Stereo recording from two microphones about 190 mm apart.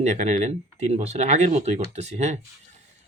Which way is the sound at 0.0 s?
35° right (ahead or behind).